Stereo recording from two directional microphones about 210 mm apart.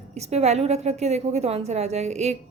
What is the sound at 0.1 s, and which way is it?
A woman's voice, 30° right (ahead or behind).